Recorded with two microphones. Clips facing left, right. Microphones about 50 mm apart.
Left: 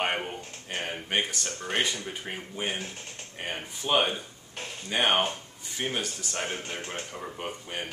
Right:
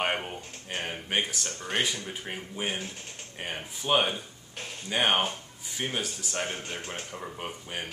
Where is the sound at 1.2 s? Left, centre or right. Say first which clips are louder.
Left 1 dB; centre.